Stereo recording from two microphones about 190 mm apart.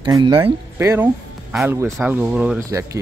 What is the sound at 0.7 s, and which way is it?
Speech, 15° right (ahead or behind).